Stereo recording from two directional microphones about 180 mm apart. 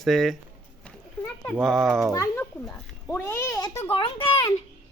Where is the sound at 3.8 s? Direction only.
30° left (ahead or behind).